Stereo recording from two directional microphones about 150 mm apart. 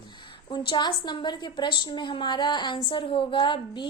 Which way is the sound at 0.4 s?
35° left (ahead or behind).